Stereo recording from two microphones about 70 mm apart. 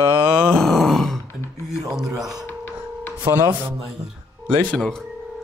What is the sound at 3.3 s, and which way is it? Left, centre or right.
Speech, right.